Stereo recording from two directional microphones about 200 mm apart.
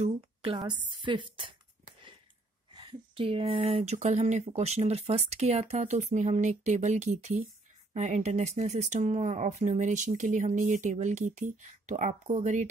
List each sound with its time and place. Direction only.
0.0 s a woman's voice: 25° right (ahead or behind)
2.7 s speech: 20° right (ahead or behind)